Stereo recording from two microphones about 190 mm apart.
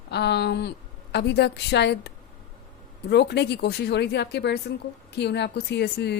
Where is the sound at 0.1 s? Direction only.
60° left (ahead or behind).